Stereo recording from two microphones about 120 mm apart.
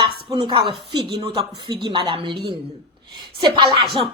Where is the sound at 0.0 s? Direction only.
40° right (ahead or behind).